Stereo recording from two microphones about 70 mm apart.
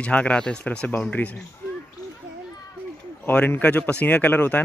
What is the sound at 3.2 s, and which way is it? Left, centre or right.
Speech, left.